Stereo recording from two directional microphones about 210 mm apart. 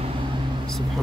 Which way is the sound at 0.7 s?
Centre (ahead or behind).